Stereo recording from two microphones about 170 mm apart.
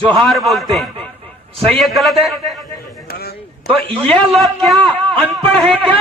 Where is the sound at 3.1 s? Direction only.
65° left (ahead or behind).